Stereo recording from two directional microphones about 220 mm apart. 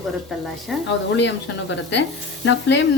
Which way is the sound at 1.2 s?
55° left (ahead or behind).